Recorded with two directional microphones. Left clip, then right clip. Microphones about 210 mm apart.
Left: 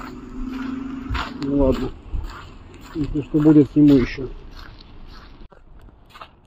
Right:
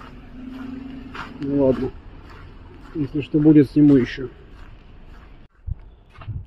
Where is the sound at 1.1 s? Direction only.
35° left (ahead or behind).